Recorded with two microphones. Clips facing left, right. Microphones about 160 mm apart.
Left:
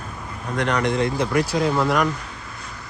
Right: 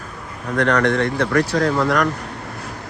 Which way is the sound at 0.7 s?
75° right (ahead or behind).